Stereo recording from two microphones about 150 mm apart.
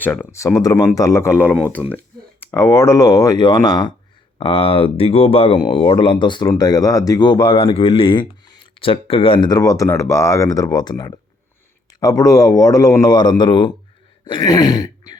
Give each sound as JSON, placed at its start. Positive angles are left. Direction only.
{"t": 0.0, "sound": "a man's voice", "side_deg": 10}